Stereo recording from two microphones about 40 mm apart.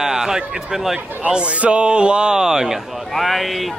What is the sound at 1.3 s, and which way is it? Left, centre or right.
A man's voice, right.